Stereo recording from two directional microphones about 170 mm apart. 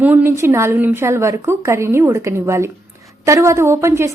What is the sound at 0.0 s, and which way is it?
A woman's voice, 10° right (ahead or behind).